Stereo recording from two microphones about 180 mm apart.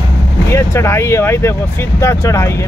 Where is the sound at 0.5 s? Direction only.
15° left (ahead or behind).